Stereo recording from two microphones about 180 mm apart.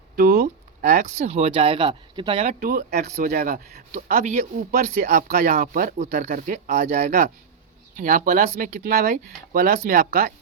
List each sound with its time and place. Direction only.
0.2 s speech: 55° right (ahead or behind); by 2.6 s 35° right (ahead or behind)
2.6 s speech: 55° right (ahead or behind)